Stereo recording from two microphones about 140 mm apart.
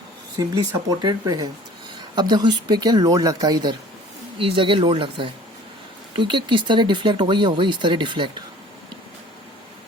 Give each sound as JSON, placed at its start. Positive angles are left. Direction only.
{"t": 0.3, "sound": "speech", "side_deg": -25}